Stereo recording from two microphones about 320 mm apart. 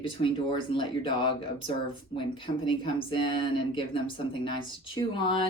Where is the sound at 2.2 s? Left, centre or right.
Centre.